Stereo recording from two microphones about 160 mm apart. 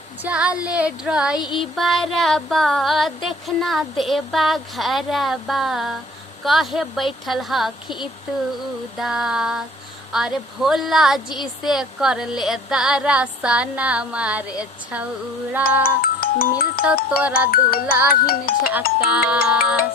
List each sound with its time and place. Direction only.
0.2 s female singing: 10° right (ahead or behind)
1.5 s speech: centre (ahead or behind)
9.0 s speech: centre (ahead or behind)
15.8 s speech: 65° left (ahead or behind)
17.1 s female singing: 5° right (ahead or behind)
17.5 s music: 65° left (ahead or behind)
18.3 s speech: 70° left (ahead or behind)
18.9 s female singing: 5° right (ahead or behind)